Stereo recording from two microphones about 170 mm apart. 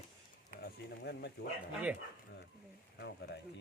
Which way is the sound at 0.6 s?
80° left.